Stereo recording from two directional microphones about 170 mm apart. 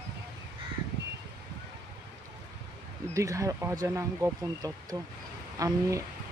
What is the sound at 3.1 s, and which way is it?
Speech, 20° right (ahead or behind).